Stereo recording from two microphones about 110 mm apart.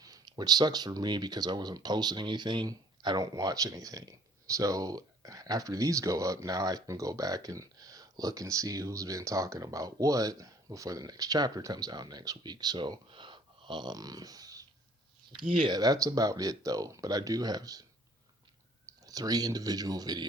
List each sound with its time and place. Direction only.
0.0 s speech: 35° right (ahead or behind)
15.3 s speech: 45° right (ahead or behind)
18.9 s speech: 35° right (ahead or behind)